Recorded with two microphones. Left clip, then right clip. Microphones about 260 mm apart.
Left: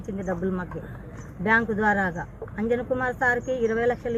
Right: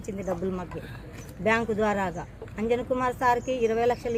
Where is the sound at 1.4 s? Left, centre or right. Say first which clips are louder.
Left 3 dB; centre.